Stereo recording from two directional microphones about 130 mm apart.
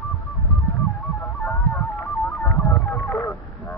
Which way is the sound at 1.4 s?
15° left (ahead or behind).